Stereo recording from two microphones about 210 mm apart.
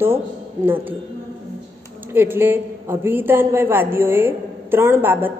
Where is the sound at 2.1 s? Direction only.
10° right (ahead or behind).